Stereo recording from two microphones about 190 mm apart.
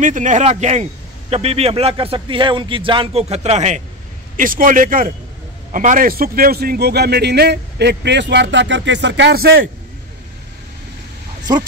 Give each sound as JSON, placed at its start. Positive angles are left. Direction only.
{"t": 0.0, "sound": "a man's voice", "side_deg": -40}